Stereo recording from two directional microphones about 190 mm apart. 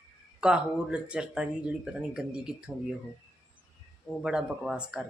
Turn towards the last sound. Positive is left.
turn(degrees=-5)  # may be behind; listen again after turning